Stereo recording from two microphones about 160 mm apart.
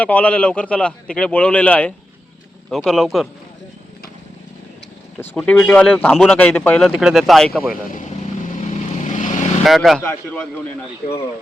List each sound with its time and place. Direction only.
0.0 s a man's voice: 10° left (ahead or behind)
5.2 s a man's voice: 10° left (ahead or behind)
7.9 s vehicle: 50° left (ahead or behind)
9.6 s speech: centre (ahead or behind)